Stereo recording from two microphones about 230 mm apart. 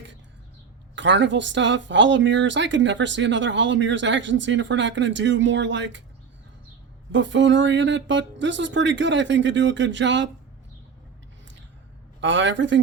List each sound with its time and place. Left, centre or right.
0.9 s speech: right
7.1 s speech: right
12.2 s speech: right